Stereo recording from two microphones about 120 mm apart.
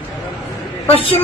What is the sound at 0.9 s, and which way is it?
Speech, 50° left (ahead or behind).